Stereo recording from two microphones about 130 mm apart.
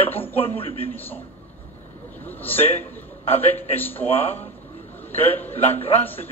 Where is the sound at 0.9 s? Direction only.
15° left (ahead or behind).